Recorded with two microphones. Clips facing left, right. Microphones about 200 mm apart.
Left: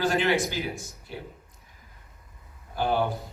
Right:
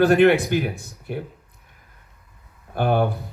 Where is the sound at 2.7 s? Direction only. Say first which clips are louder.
Right 5 dB; 60° right (ahead or behind).